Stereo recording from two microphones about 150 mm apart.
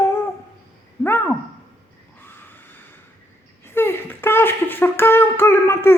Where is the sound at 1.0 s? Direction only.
15° left (ahead or behind).